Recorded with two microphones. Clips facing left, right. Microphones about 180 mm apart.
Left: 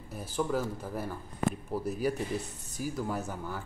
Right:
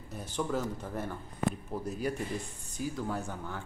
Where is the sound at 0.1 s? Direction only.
5° left (ahead or behind).